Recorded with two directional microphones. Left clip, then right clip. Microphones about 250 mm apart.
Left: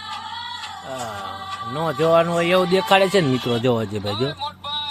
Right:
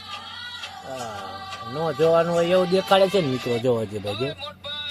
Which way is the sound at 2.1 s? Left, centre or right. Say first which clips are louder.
Left 5 dB; left.